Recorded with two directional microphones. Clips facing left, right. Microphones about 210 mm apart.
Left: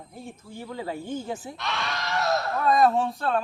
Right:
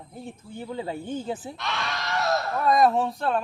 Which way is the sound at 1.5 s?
Centre (ahead or behind).